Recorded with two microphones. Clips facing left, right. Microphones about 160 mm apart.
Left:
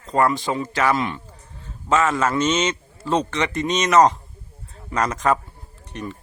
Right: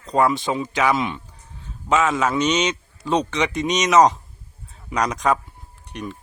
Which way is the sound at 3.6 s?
15° right (ahead or behind).